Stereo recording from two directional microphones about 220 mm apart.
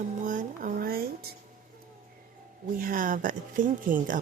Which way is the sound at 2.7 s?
40° right (ahead or behind).